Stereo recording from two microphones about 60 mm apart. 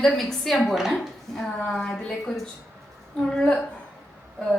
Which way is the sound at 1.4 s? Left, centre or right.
Centre.